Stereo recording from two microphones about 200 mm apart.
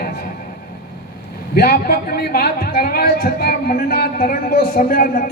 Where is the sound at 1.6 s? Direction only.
50° left (ahead or behind).